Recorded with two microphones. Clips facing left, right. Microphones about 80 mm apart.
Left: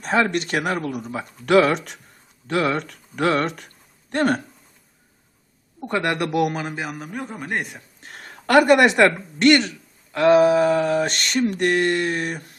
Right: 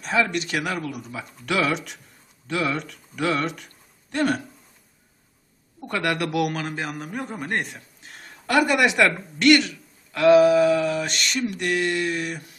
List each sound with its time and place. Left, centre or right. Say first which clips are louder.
0.0 s speech: left 3 dB; left
5.8 s a man's voice: left 2 dB; left; by 7.8 s centre
8.0 s speech: left 5 dB; left